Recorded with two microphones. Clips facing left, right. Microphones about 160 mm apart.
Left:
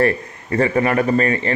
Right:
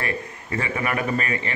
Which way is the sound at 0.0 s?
40° left (ahead or behind).